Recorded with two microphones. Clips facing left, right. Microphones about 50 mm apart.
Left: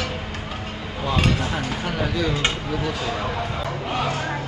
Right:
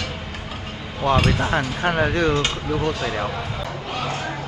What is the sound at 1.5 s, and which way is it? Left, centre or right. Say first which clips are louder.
Speech: right 5 dB; right.